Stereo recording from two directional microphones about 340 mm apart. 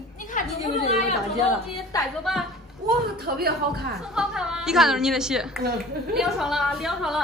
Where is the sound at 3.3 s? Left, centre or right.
Right.